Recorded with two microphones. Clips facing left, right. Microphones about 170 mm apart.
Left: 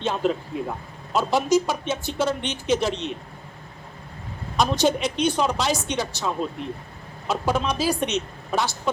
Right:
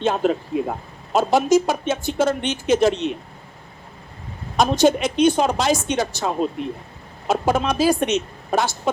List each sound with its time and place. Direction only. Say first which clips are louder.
0.0 s speech: right 4 dB; 50° right (ahead or behind)
4.5 s speech: right 4 dB; 50° right (ahead or behind)